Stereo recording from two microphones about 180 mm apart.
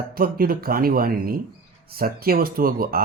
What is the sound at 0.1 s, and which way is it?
Speech, 55° right (ahead or behind).